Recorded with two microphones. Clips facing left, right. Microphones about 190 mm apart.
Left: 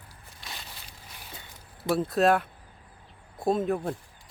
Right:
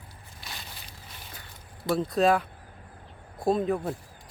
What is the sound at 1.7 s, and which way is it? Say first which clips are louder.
Speech: even; 5° left (ahead or behind).